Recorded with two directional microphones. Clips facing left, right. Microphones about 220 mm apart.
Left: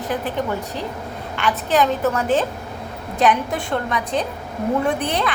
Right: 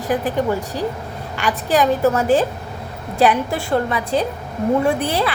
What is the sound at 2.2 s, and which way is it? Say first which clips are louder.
Speech: right 2 dB; 40° right (ahead or behind).